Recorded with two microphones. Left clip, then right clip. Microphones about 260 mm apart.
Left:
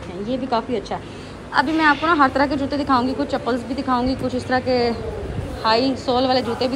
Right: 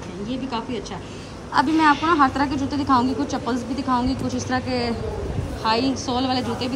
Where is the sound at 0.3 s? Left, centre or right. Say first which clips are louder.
Left 7 dB; centre.